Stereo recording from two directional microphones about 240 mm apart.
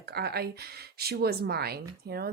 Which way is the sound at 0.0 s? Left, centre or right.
Right.